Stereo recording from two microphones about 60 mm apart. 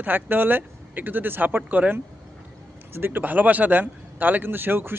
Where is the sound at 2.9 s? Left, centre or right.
Right.